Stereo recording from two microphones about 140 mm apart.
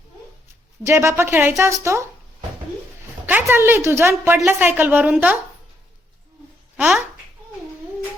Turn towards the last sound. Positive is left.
turn(degrees=-10)  # may be behind; listen again after turning